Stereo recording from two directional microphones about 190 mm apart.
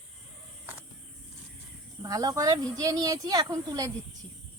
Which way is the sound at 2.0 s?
20° right (ahead or behind).